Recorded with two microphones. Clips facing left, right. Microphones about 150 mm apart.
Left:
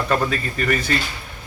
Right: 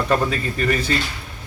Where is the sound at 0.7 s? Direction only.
30° right (ahead or behind).